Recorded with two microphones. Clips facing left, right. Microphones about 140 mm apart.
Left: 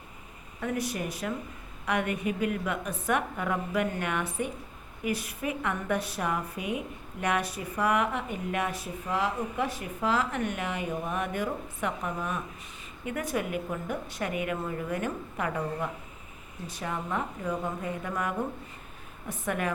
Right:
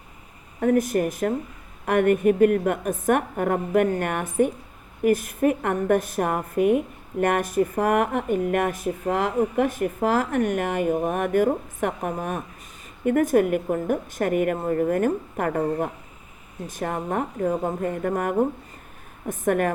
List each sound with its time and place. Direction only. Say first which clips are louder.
0.6 s a woman's voice: right 11 dB; 45° right (ahead or behind)